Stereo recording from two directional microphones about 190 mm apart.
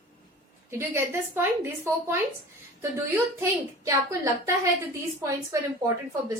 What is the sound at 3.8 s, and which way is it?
Speech, 15° right (ahead or behind).